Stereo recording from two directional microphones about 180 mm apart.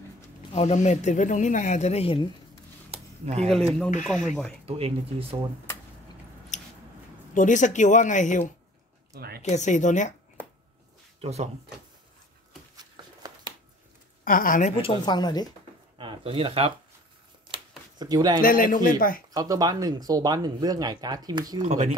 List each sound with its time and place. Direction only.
0.6 s speech: 40° left (ahead or behind)
2.9 s a sound: 35° right (ahead or behind)
4.6 s speech: 30° right (ahead or behind)
6.5 s scissors: 40° left (ahead or behind)
7.3 s speech: 45° left (ahead or behind)
11.1 s speech: 35° right (ahead or behind)
12.7 s a sound: 20° right (ahead or behind)
14.2 s speech: 50° left (ahead or behind)
14.8 s a woman's voice: 25° left (ahead or behind)
16.0 s speech: 30° right (ahead or behind)
17.5 s a sound: 20° right (ahead or behind)
18.4 s speech: 50° left (ahead or behind)
19.3 s speech: 20° right (ahead or behind)
21.5 s speech: 40° right (ahead or behind)